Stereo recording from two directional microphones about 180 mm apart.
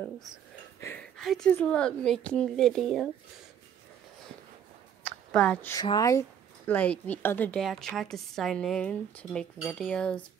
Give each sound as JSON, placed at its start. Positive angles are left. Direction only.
{"t": 0.7, "sound": "a sound", "side_deg": 15}
{"t": 1.1, "sound": "a woman's voice", "side_deg": 0}
{"t": 5.3, "sound": "speech", "side_deg": 5}
{"t": 6.7, "sound": "a woman's voice", "side_deg": 10}